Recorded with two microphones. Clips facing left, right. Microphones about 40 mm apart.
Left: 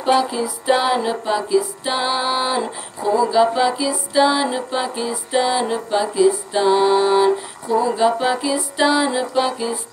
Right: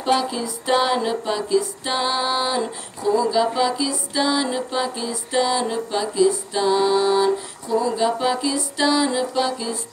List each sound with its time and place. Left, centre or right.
0.0 s music: centre